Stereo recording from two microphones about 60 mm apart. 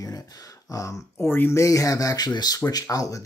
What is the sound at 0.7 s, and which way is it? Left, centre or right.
Speech, left.